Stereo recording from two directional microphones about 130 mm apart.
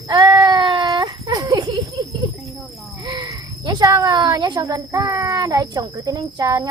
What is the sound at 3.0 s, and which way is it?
Speech, 35° right (ahead or behind).